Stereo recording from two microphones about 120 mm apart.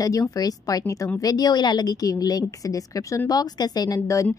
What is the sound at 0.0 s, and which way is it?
A woman's voice, 30° left (ahead or behind).